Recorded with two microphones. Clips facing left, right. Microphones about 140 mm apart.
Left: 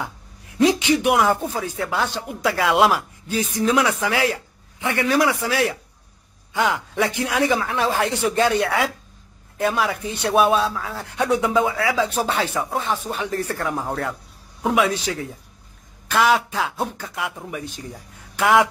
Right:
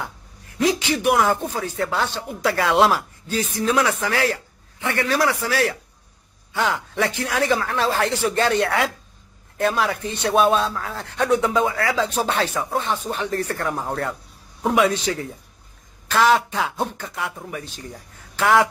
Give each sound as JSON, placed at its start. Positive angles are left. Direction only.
{"t": 0.6, "sound": "speech", "side_deg": 25}
{"t": 8.5, "sound": "speech", "side_deg": 5}